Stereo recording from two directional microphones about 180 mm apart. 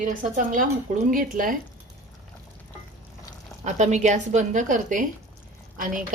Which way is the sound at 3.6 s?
40° right (ahead or behind).